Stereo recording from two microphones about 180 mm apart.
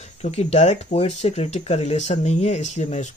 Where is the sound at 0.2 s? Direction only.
35° left (ahead or behind).